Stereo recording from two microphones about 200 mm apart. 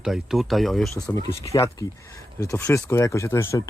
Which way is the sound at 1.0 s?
15° left (ahead or behind).